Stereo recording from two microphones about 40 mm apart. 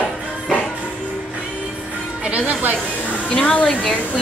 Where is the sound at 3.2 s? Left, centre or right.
Left.